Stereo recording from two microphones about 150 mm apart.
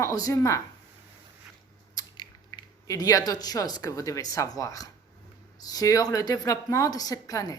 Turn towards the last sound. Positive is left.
turn(degrees=25)  # may be behind; listen again after turning